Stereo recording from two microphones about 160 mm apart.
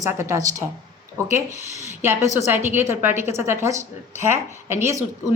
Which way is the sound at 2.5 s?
15° right (ahead or behind).